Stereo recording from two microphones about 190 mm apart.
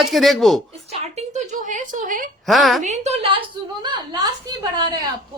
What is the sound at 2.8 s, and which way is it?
Speech, 35° right (ahead or behind).